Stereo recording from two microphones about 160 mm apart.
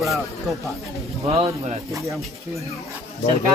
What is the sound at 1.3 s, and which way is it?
Speech, 40° right (ahead or behind).